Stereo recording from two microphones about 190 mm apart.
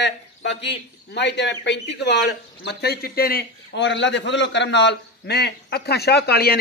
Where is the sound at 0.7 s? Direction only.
65° left (ahead or behind).